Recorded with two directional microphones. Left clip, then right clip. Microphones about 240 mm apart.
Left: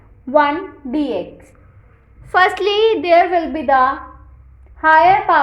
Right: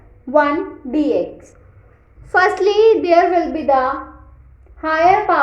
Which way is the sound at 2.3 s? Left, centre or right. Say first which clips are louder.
Even; centre.